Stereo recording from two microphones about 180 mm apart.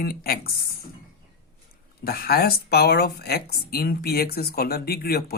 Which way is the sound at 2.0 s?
55° left (ahead or behind).